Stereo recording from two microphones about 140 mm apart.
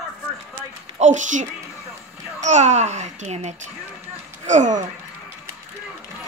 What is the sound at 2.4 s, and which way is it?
A child's voice, 55° right (ahead or behind).